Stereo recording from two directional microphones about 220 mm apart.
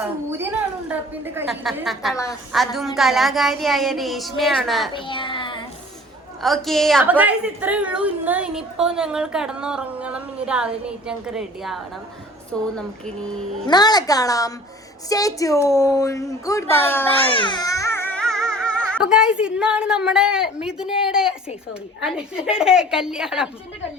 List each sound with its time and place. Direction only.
0.0 s a woman's voice: 10° right (ahead or behind)
4.9 s child singing: 20° left (ahead or behind)
6.4 s a woman's voice: centre (ahead or behind)
13.7 s a woman's voice: 20° left (ahead or behind)
17.3 s a woman's voice: 20° left (ahead or behind); by 23.5 s 5° right (ahead or behind)